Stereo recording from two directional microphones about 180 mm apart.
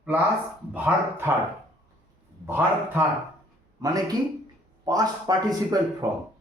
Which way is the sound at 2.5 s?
10° right (ahead or behind).